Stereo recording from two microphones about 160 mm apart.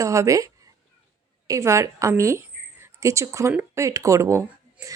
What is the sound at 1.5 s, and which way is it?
A woman's voice, 20° right (ahead or behind).